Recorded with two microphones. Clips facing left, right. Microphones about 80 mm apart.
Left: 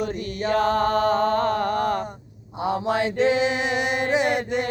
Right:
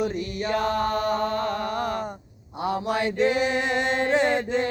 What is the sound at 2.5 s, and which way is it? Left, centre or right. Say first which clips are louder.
Chant: left 2 dB; left.